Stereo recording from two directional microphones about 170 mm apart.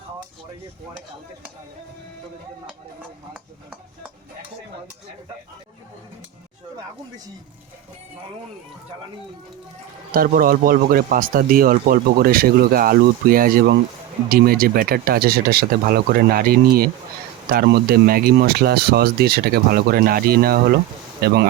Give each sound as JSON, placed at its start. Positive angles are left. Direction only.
{"t": 10.1, "sound": "speech", "side_deg": -60}